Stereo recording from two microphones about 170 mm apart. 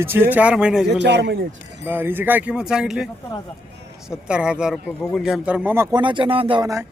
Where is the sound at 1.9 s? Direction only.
10° right (ahead or behind).